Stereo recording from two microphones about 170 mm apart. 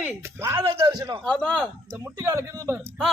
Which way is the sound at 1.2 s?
5° left (ahead or behind).